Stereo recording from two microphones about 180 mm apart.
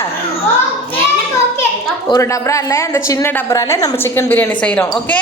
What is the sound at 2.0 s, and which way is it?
A woman's voice, 20° left (ahead or behind).